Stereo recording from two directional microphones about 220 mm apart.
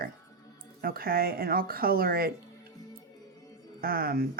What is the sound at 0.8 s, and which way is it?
Speech, 40° right (ahead or behind).